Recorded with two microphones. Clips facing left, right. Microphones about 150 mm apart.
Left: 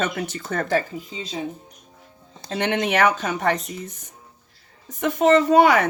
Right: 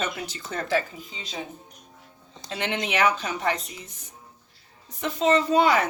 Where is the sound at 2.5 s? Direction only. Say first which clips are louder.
Left 6 dB; 45° left (ahead or behind).